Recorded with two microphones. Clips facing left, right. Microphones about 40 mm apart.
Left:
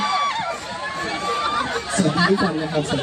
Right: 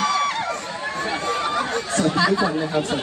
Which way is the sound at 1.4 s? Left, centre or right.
Centre.